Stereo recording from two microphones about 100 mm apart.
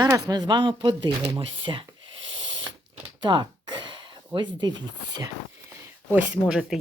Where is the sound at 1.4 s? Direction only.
60° right (ahead or behind).